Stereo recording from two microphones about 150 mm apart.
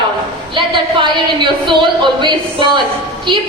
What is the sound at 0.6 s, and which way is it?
A woman's voice, 35° right (ahead or behind).